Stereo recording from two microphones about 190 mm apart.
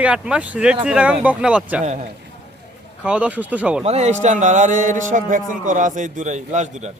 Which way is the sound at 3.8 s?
35° right (ahead or behind).